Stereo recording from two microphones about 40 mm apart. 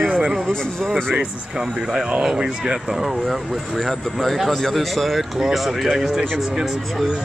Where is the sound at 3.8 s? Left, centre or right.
Centre.